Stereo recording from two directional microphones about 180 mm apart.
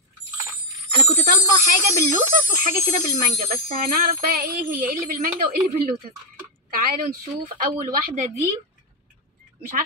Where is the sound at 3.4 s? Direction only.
55° right (ahead or behind).